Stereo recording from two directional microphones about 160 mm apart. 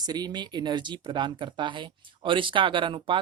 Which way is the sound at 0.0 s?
25° right (ahead or behind).